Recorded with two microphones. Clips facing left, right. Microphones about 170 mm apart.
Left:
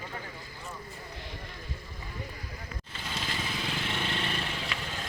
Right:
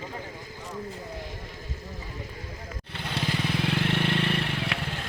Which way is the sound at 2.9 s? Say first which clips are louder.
Right 7 dB; 60° right (ahead or behind).